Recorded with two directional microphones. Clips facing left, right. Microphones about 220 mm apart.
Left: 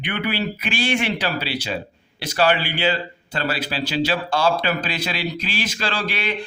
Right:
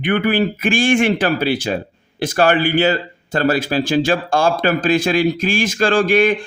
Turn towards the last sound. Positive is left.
turn(degrees=-50)  # may be behind; listen again after turning